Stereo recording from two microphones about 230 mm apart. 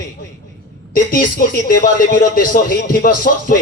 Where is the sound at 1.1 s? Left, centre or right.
Left.